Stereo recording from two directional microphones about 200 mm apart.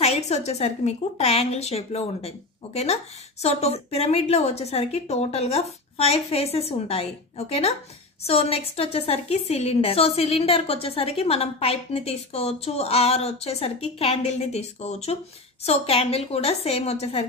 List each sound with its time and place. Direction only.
0.0 s a woman's voice: 30° left (ahead or behind)